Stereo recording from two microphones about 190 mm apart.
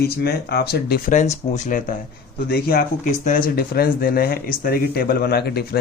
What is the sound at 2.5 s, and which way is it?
Speech, 50° left (ahead or behind).